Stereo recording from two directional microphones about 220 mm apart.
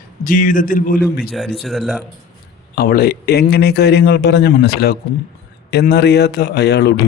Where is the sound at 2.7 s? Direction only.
45° left (ahead or behind).